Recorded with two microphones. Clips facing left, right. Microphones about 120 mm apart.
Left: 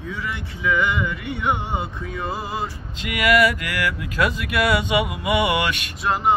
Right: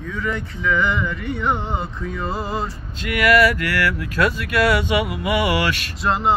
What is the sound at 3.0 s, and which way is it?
Speech, 15° left (ahead or behind).